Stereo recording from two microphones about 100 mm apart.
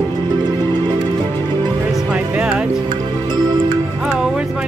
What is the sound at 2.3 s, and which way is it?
Music, 10° right (ahead or behind).